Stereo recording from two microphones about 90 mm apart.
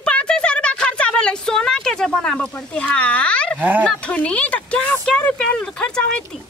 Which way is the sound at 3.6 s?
20° right (ahead or behind).